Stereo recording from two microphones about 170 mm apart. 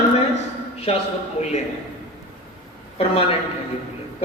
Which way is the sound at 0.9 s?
35° left (ahead or behind).